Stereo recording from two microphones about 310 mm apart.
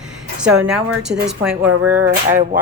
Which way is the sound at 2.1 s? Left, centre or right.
Right.